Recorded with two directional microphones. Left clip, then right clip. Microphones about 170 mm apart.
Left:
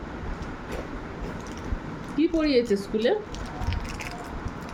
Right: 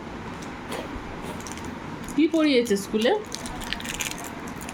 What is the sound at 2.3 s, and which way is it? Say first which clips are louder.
Speech: right 1 dB; 25° right (ahead or behind).